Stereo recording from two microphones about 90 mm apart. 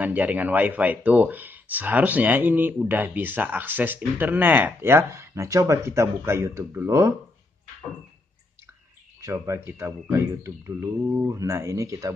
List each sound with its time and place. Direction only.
0.0 s speech: 15° right (ahead or behind); by 7.2 s 30° right (ahead or behind)
9.2 s speech: 35° right (ahead or behind)
11.0 s speech: 10° right (ahead or behind)
11.2 s speech: 35° right (ahead or behind)